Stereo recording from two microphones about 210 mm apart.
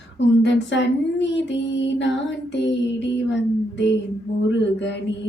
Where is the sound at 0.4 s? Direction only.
60° left (ahead or behind).